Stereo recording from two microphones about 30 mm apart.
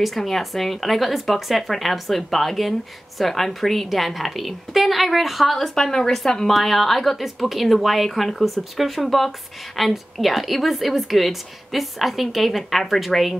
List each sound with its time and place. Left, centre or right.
0.0 s a woman's voice: centre
5.8 s a woman's voice: centre